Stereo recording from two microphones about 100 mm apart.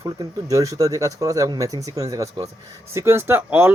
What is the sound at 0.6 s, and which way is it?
Speech, 35° right (ahead or behind).